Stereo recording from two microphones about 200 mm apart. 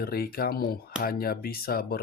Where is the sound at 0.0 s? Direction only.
50° left (ahead or behind).